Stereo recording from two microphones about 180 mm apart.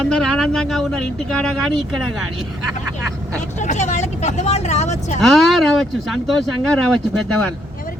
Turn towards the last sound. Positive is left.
turn(degrees=5)  # may be behind; listen again after turning